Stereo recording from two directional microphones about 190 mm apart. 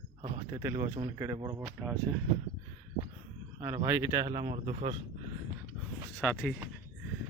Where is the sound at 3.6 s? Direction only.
20° right (ahead or behind).